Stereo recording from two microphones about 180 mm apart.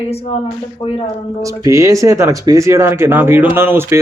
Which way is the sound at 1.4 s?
20° right (ahead or behind).